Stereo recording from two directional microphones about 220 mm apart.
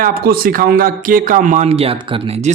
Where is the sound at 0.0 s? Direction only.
40° right (ahead or behind).